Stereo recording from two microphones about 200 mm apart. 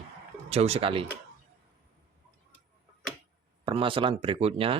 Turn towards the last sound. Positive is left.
turn(degrees=-30)  # may be behind; listen again after turning